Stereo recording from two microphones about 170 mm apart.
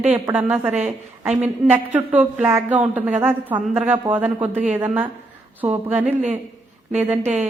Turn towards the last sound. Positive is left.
turn(degrees=-40)  # may be behind; listen again after turning